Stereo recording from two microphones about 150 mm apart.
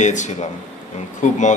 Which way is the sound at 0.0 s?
55° left (ahead or behind).